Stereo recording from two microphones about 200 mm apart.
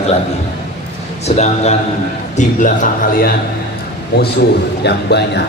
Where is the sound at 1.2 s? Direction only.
35° left (ahead or behind).